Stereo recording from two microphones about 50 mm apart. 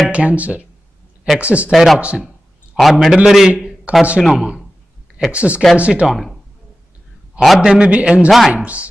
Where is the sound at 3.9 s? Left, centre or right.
Right.